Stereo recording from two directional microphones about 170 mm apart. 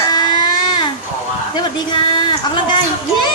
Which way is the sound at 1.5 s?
25° left (ahead or behind).